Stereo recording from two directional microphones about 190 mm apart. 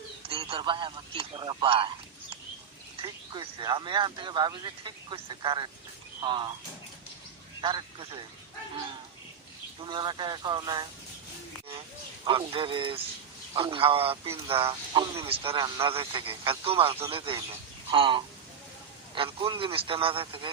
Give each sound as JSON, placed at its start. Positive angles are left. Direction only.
{"t": 0.3, "sound": "speech", "side_deg": -30}
{"t": 3.0, "sound": "speech", "side_deg": -20}
{"t": 7.6, "sound": "speech", "side_deg": -25}
{"t": 9.8, "sound": "speech", "side_deg": -25}
{"t": 12.2, "sound": "speech", "side_deg": -25}